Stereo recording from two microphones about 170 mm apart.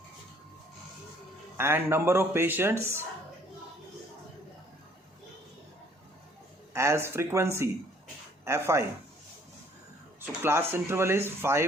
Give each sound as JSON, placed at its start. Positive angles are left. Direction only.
{"t": 1.5, "sound": "speech", "side_deg": -15}
{"t": 6.7, "sound": "speech", "side_deg": -15}
{"t": 10.2, "sound": "speech", "side_deg": -15}